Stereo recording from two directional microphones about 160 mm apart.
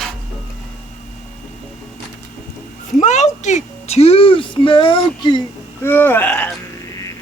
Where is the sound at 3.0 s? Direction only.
45° left (ahead or behind); by 5.4 s 30° left (ahead or behind).